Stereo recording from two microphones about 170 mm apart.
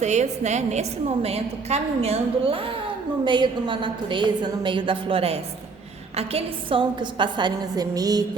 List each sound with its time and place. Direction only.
0.0 s a woman's voice: 45° right (ahead or behind); by 8.2 s 20° right (ahead or behind)